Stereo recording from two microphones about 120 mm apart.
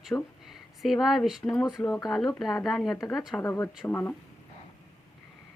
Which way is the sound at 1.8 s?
15° left (ahead or behind).